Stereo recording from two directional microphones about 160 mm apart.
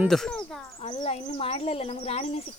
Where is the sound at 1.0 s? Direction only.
30° left (ahead or behind).